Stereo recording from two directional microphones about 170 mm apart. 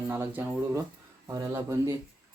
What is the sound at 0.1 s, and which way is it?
Speech, 15° right (ahead or behind).